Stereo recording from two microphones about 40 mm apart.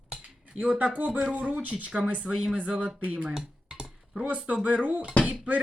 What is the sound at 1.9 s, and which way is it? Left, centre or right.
Speech, right.